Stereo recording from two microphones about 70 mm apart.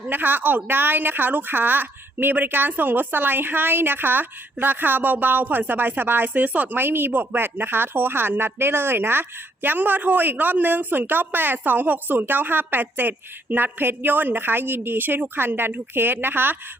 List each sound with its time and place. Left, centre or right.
0.1 s speech: right